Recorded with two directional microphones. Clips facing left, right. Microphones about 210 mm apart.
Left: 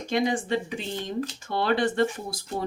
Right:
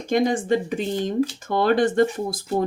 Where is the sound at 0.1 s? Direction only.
45° right (ahead or behind).